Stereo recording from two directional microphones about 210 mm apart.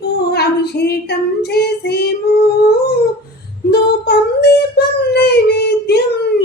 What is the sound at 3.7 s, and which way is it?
Child singing, 50° left (ahead or behind).